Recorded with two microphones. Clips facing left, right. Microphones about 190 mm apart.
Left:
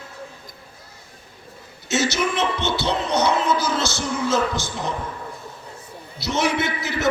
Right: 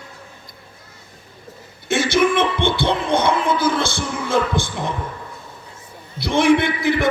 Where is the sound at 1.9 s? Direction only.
55° right (ahead or behind).